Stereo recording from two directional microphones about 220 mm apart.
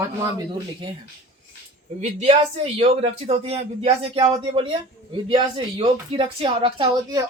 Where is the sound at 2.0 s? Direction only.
30° right (ahead or behind).